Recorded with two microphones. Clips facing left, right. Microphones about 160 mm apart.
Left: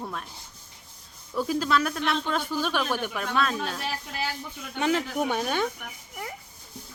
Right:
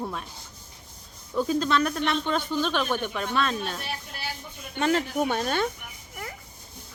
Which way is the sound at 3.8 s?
90° left.